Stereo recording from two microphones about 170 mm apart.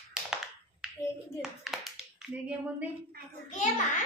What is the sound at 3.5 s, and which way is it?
Speech, 45° left (ahead or behind).